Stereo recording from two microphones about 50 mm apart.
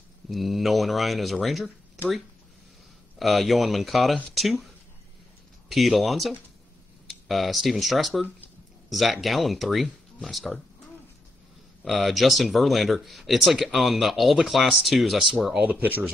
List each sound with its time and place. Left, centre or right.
0.3 s speech: centre
3.2 s speech: centre
5.9 s speech: centre
11.8 s speech: centre
15.6 s speech: right